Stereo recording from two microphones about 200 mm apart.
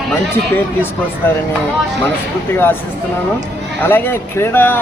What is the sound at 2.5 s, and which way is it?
Speech, 10° left (ahead or behind).